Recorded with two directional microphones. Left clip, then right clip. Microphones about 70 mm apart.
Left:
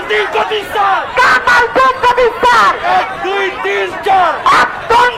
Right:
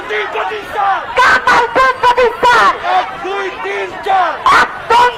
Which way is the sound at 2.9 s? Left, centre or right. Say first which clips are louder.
Left 2 dB; centre.